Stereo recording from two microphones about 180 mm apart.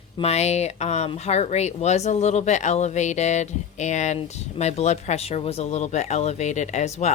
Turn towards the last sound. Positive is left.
turn(degrees=40)  # may be behind; listen again after turning